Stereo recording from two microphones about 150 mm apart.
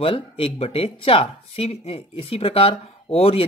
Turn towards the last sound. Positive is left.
turn(degrees=40)  # may be behind; listen again after turning